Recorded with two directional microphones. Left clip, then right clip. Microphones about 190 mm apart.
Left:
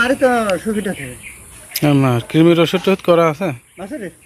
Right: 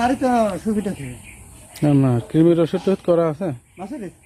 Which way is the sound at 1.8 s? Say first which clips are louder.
Left 4 dB; 5° left (ahead or behind).